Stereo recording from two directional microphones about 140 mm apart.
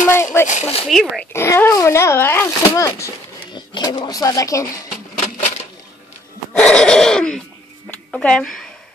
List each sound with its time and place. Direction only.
0.0 s speech: 20° left (ahead or behind)
0.5 s speech: 60° left (ahead or behind)
0.8 s a sound: centre (ahead or behind)
1.3 s speech: 20° left (ahead or behind)
3.5 s speech: 35° left (ahead or behind)
6.6 s a sound: 5° left (ahead or behind)